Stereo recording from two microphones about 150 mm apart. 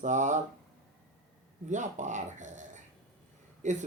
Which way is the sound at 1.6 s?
55° right (ahead or behind).